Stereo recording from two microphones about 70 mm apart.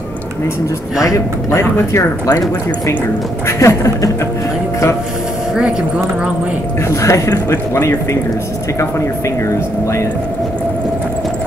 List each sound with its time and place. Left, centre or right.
1.0 s speech: left
3.4 s speech: left
6.9 s speech: left